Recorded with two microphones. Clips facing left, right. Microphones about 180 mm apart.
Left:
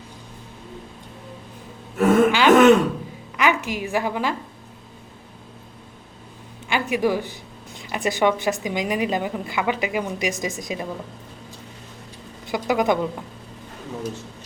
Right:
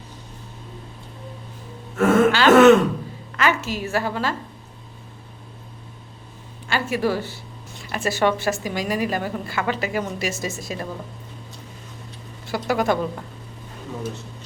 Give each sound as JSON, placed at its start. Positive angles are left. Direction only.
{"t": 2.0, "sound": "a sound", "side_deg": 15}
{"t": 3.3, "sound": "a woman's voice", "side_deg": 15}
{"t": 6.7, "sound": "a woman's voice", "side_deg": 15}
{"t": 12.5, "sound": "a woman's voice", "side_deg": 15}